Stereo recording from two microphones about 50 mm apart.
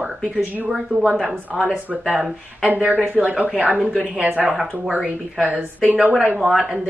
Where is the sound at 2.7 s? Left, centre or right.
Right.